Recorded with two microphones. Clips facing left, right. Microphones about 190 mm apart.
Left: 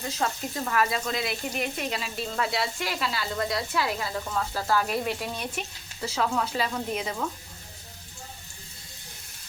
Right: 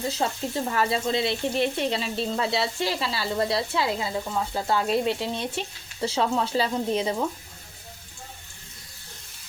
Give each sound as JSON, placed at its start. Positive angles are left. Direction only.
{"t": 0.1, "sound": "speech", "side_deg": -30}